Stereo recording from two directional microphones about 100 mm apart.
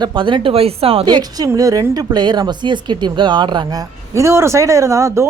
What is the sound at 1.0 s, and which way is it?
Speech, 45° right (ahead or behind).